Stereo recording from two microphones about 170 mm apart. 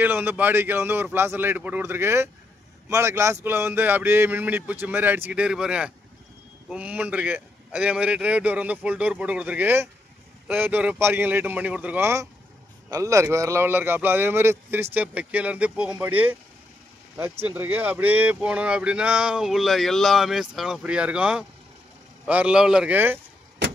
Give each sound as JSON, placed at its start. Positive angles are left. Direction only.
{"t": 0.0, "sound": "speech", "side_deg": -10}